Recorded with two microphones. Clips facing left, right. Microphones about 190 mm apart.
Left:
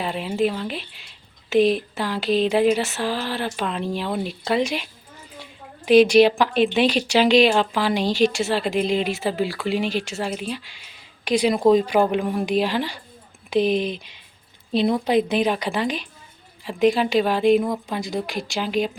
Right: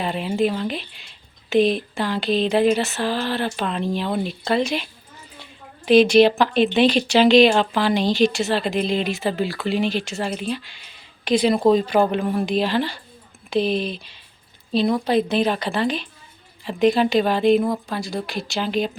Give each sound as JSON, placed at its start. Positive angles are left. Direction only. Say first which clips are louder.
{"t": 0.0, "sound": "a woman's voice", "louder": "right 1 dB", "side_deg": 0}